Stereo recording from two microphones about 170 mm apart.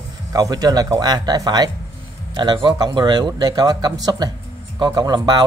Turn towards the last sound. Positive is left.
turn(degrees=-25)  # may be behind; listen again after turning